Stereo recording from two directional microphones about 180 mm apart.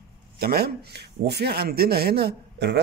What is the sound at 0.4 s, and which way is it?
Speech, 60° right (ahead or behind).